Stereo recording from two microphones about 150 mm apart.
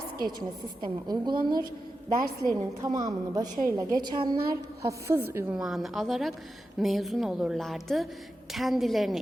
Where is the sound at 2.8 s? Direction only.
25° right (ahead or behind).